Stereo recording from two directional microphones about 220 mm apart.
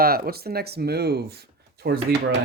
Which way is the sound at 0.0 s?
45° right (ahead or behind).